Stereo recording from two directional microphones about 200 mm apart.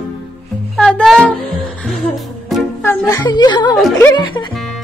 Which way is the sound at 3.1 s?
20° left (ahead or behind).